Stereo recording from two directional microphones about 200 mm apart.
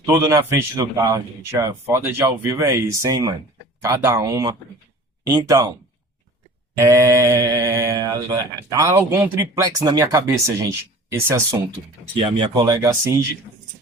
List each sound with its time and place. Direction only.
0.0 s speech: 15° right (ahead or behind)
6.7 s speech: 15° right (ahead or behind)
12.1 s speech: 20° right (ahead or behind)